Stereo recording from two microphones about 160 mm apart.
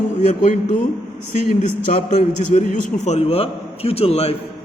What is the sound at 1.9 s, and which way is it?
A man's voice, 45° left (ahead or behind).